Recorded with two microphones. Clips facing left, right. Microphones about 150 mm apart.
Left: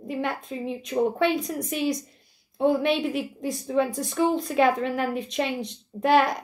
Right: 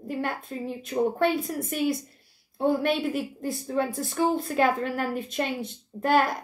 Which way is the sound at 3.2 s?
20° left (ahead or behind).